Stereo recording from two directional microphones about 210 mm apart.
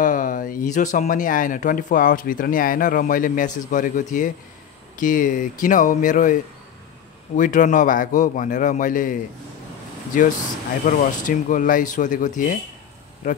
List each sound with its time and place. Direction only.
0.0 s speech: 40° left (ahead or behind)
7.3 s speech: 35° left (ahead or behind)